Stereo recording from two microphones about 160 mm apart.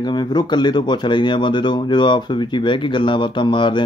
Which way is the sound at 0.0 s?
30° left (ahead or behind).